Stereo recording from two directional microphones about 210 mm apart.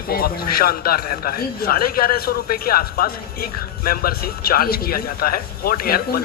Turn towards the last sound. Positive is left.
turn(degrees=45)  # may be behind; listen again after turning